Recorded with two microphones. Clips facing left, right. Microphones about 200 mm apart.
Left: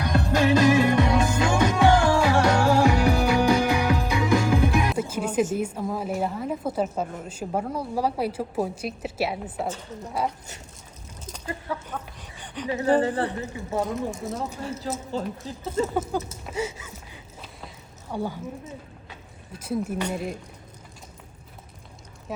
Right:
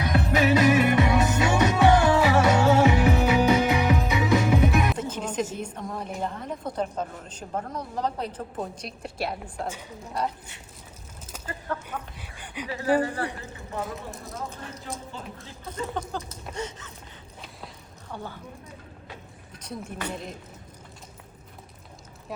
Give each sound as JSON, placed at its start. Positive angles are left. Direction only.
{"t": 0.0, "sound": "music", "side_deg": -5}
{"t": 4.9, "sound": "a woman's voice", "side_deg": 10}
{"t": 11.9, "sound": "speech", "side_deg": -10}
{"t": 13.8, "sound": "a woman's voice", "side_deg": 0}
{"t": 15.4, "sound": "speech", "side_deg": 25}
{"t": 16.0, "sound": "a woman's voice", "side_deg": 5}
{"t": 18.1, "sound": "a woman's voice", "side_deg": 10}
{"t": 19.5, "sound": "a woman's voice", "side_deg": 5}